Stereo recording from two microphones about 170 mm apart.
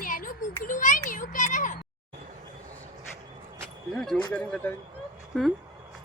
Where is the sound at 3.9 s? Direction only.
5° left (ahead or behind).